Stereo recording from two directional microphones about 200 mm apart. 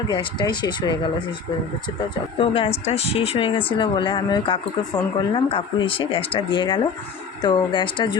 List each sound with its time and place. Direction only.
0.1 s speech: 20° left (ahead or behind)
2.4 s speech: 25° left (ahead or behind)